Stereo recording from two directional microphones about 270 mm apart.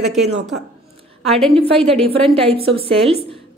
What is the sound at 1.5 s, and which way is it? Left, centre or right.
A woman's voice, right.